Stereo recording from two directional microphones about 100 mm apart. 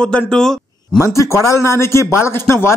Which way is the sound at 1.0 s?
30° left (ahead or behind).